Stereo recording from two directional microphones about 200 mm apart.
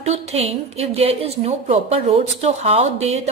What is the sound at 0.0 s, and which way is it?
A woman's voice, 35° right (ahead or behind).